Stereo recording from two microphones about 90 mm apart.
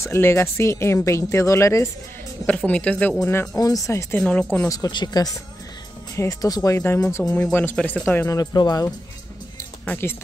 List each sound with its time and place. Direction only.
0.0 s speech: 30° left (ahead or behind)
2.4 s speech: 15° left (ahead or behind)
3.5 s speech: 40° left (ahead or behind)
4.2 s speech: 15° left (ahead or behind)
4.6 s speech: 50° left (ahead or behind)
7.7 s speech: 15° left (ahead or behind)
8.3 s speech: 45° left (ahead or behind)
9.8 s speech: 25° left (ahead or behind)